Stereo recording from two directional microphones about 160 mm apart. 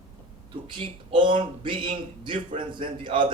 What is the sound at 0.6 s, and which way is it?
Speech, 30° right (ahead or behind).